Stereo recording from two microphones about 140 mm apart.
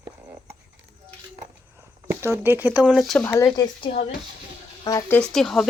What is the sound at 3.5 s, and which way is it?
Speech, 35° left (ahead or behind).